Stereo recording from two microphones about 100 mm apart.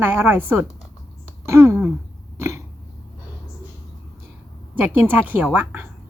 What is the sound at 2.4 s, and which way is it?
Throat clearing, 30° right (ahead or behind).